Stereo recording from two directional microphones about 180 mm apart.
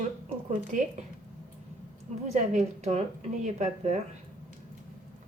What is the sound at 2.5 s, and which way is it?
A woman's voice, 40° right (ahead or behind).